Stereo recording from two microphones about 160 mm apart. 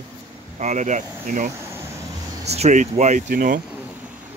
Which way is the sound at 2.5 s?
45° right (ahead or behind).